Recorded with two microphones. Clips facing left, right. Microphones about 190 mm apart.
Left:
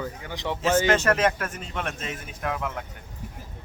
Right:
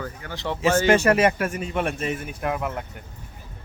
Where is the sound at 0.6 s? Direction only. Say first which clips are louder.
Right 3 dB; 10° right (ahead or behind).